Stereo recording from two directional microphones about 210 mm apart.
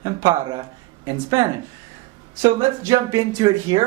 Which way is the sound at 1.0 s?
15° right (ahead or behind).